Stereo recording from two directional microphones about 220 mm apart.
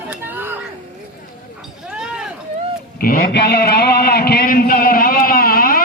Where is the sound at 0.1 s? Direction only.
10° right (ahead or behind).